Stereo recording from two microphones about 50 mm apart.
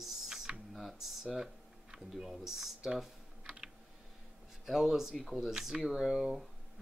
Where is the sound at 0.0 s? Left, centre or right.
Centre.